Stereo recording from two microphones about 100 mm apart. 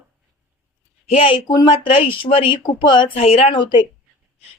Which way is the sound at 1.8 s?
60° left (ahead or behind).